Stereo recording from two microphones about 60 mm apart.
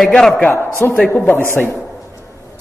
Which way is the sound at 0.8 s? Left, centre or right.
Left.